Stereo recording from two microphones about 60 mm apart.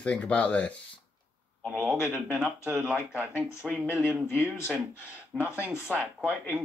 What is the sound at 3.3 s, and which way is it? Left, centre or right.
Speech, left.